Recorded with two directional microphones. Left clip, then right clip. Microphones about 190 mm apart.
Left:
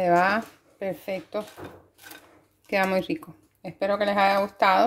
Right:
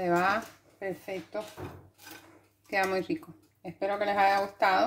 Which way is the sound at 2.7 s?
45° left (ahead or behind).